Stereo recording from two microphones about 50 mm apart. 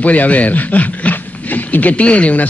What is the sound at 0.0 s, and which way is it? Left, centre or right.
A man's voice, left.